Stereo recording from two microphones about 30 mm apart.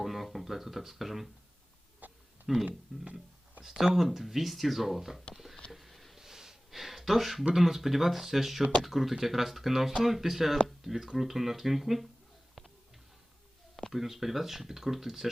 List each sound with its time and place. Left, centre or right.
0.0 s speech: centre
2.0 s a sound: right
2.5 s speech: centre
2.9 s speech: centre
3.6 s speech: centre
5.3 s a sound: centre
6.1 s snort: centre
6.7 s a sound: centre
7.5 s speech: centre
13.9 s speech: centre